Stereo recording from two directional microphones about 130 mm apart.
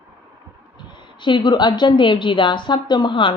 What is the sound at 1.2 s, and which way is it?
A woman's voice, 35° left (ahead or behind).